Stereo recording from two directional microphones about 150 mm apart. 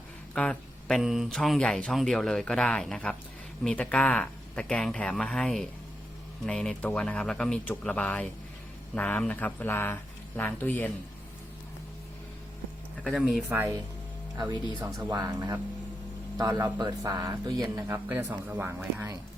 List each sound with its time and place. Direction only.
0.3 s speech: 5° left (ahead or behind)
13.1 s speech: centre (ahead or behind); by 15.4 s 25° right (ahead or behind)
16.4 s speech: 25° right (ahead or behind)